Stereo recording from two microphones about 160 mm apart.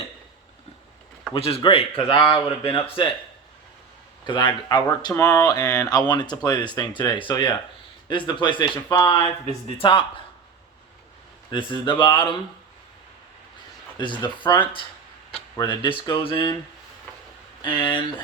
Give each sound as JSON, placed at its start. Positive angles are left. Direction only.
{"t": 1.3, "sound": "speech", "side_deg": 35}
{"t": 4.3, "sound": "speech", "side_deg": 30}
{"t": 9.1, "sound": "speech", "side_deg": 35}
{"t": 11.5, "sound": "speech", "side_deg": 30}
{"t": 14.0, "sound": "speech", "side_deg": 30}
{"t": 17.6, "sound": "speech", "side_deg": 30}